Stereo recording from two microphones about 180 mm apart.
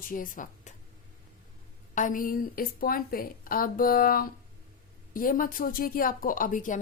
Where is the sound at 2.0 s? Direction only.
50° left (ahead or behind).